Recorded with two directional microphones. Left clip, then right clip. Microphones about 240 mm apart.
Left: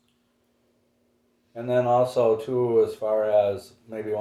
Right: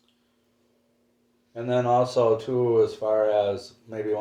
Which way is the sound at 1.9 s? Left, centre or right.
Right.